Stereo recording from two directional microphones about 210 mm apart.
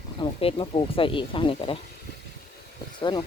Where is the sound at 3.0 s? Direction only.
20° left (ahead or behind).